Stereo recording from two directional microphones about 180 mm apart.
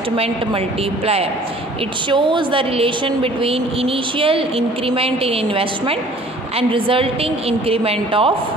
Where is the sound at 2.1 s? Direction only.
25° right (ahead or behind).